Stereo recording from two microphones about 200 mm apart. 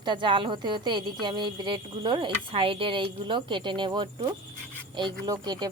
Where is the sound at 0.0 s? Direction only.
25° right (ahead or behind).